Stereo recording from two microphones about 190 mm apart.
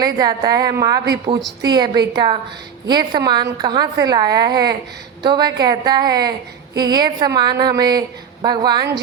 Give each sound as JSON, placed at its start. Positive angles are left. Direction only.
{"t": 0.0, "sound": "a woman's voice", "side_deg": -20}